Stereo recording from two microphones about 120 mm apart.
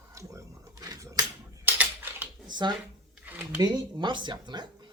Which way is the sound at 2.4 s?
40° right (ahead or behind).